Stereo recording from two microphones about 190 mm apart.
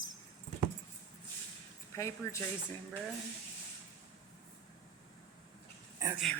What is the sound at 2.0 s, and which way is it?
Speech, 15° left (ahead or behind).